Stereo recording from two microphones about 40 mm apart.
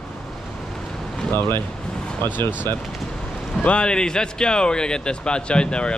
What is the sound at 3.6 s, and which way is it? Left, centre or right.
Speech, left.